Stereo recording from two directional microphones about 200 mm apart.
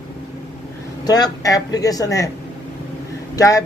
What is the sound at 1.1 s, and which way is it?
Speech, 20° left (ahead or behind).